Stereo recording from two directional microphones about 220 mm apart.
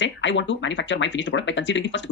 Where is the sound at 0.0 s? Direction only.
55° left (ahead or behind).